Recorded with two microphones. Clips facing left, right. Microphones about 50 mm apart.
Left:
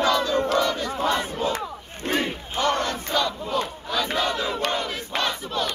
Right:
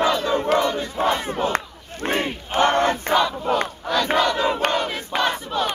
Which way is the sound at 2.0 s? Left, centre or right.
Right.